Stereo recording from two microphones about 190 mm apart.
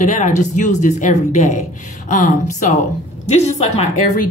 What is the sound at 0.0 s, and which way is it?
Speech, 40° left (ahead or behind).